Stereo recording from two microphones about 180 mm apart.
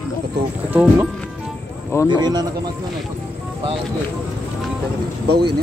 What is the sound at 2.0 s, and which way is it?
Speech, 25° right (ahead or behind).